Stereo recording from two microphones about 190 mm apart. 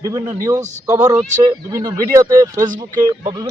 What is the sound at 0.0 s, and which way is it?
A man's voice, 15° right (ahead or behind).